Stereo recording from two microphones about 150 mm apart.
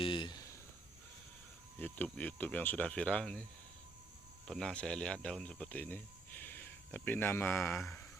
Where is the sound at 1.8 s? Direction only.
10° left (ahead or behind).